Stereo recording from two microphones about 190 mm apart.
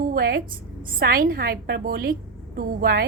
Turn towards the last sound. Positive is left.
turn(degrees=-50)  # may be behind; listen again after turning